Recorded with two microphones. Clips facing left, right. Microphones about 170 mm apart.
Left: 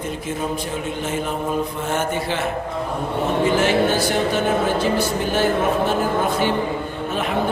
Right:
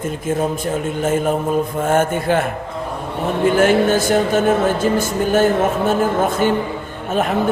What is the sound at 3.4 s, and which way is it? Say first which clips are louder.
Speech: right 6 dB; 50° right (ahead or behind).